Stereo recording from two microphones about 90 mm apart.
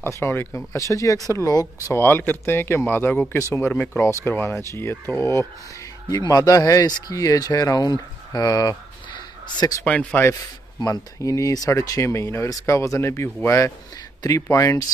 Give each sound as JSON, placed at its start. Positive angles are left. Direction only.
{"t": 0.0, "sound": "speech", "side_deg": 25}
{"t": 0.7, "sound": "speech", "side_deg": 35}
{"t": 2.0, "sound": "speech", "side_deg": 25}
{"t": 4.0, "sound": "speech", "side_deg": 30}
{"t": 6.1, "sound": "speech", "side_deg": 50}
{"t": 9.8, "sound": "speech", "side_deg": 15}
{"t": 10.8, "sound": "speech", "side_deg": 40}